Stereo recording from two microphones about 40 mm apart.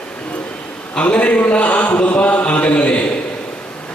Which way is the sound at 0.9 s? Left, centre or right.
Left.